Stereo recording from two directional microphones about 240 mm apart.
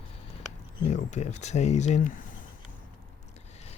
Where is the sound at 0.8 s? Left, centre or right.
Left.